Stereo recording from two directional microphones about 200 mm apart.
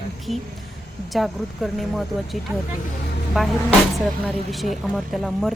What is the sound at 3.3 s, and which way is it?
Speech, 5° right (ahead or behind).